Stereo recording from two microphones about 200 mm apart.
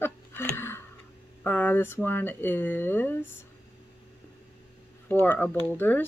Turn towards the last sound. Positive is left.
turn(degrees=10)  # may be behind; listen again after turning